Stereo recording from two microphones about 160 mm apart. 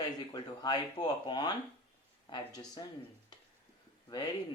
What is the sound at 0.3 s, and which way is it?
Speech, 30° left (ahead or behind).